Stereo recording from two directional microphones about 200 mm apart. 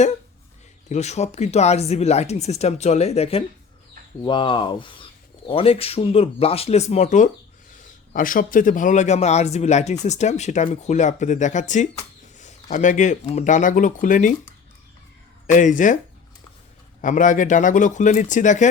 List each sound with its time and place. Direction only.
0.9 s a man's voice: 35° left (ahead or behind)
15.4 s a man's voice: 40° left (ahead or behind)
17.0 s a man's voice: 40° left (ahead or behind)